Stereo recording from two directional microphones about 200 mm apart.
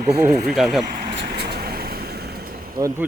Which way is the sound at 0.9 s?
50° right (ahead or behind).